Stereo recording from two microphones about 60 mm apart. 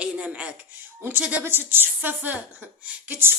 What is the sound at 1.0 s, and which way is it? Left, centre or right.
A woman's voice, right.